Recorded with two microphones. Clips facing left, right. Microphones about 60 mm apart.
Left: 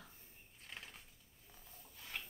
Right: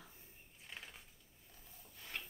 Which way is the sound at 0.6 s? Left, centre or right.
Centre.